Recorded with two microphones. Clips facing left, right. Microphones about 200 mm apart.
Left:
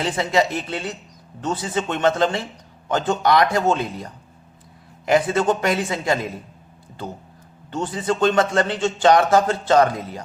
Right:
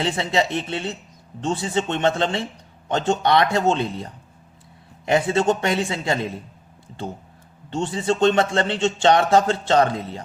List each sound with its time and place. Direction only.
0.0 s a man's voice: 25° right (ahead or behind)
7.7 s a man's voice: 25° right (ahead or behind)